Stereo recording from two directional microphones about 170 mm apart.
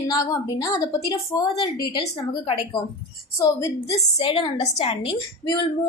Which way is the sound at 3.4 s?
20° left (ahead or behind).